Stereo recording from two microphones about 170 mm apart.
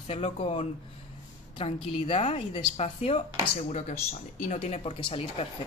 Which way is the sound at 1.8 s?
30° left (ahead or behind).